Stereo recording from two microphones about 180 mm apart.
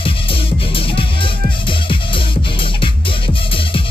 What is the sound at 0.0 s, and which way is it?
Music, 30° left (ahead or behind).